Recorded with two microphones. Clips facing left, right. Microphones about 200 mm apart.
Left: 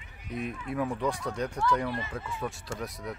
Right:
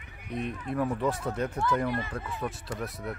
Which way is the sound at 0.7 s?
5° right (ahead or behind).